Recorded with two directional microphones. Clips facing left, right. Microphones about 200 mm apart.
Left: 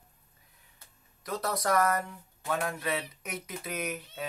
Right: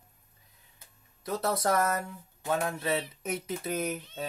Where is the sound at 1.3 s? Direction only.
25° right (ahead or behind).